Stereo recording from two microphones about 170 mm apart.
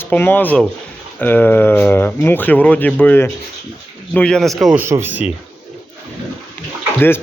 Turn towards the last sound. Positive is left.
turn(degrees=10)  # may be behind; listen again after turning